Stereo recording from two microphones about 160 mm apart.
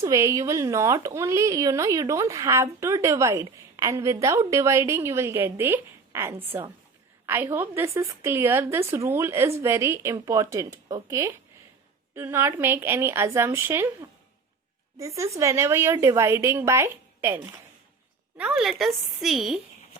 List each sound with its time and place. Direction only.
0.0 s speech: 20° right (ahead or behind)
14.9 s a woman's voice: 20° right (ahead or behind); by 19.5 s centre (ahead or behind)